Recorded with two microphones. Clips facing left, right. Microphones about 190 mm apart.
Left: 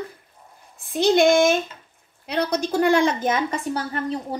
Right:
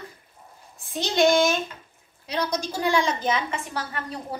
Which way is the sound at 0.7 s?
55° left (ahead or behind).